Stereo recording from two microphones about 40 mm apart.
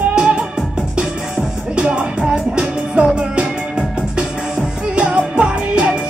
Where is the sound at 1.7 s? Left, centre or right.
Right.